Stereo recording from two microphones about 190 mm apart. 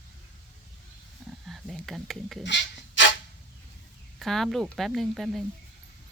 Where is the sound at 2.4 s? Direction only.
70° left (ahead or behind).